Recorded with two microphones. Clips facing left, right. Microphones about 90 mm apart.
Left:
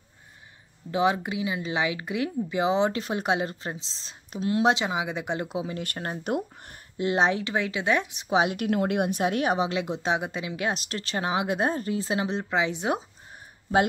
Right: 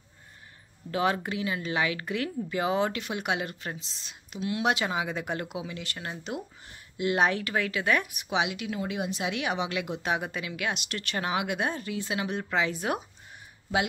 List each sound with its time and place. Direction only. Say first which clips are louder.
0.9 s speech: left 3 dB; 15° left (ahead or behind)
4.8 s speech: left 2 dB; 15° left (ahead or behind)
5.8 s speech: left 5 dB; 45° left (ahead or behind)
7.0 s speech: left 2 dB; 25° left (ahead or behind)
9.7 s speech: left 3 dB; 30° left (ahead or behind)